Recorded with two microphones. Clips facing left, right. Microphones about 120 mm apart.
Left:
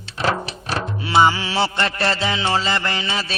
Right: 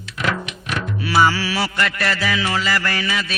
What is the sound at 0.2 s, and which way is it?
Music, 30° left (ahead or behind).